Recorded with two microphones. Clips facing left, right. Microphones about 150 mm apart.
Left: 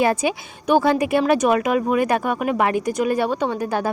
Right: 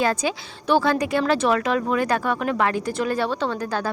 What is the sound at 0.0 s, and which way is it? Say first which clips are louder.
Speech: left 3 dB; 25° left (ahead or behind).